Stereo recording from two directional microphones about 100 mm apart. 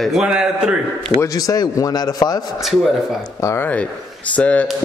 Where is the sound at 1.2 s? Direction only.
35° left (ahead or behind).